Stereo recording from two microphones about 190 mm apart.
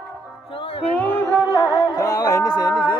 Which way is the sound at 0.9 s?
10° left (ahead or behind).